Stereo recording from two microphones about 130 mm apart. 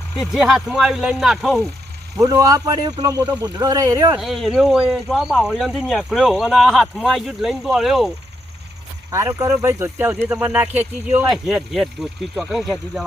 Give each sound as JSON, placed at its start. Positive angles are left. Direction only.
{"t": 0.2, "sound": "speech", "side_deg": -5}
{"t": 2.1, "sound": "speech", "side_deg": -25}
{"t": 4.2, "sound": "speech", "side_deg": 0}
{"t": 9.0, "sound": "speech", "side_deg": -20}
{"t": 11.3, "sound": "speech", "side_deg": 0}